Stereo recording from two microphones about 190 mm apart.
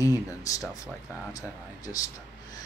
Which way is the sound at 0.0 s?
15° left (ahead or behind).